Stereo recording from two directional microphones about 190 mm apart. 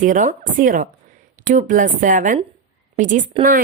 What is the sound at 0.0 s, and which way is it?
A woman's voice, 40° right (ahead or behind).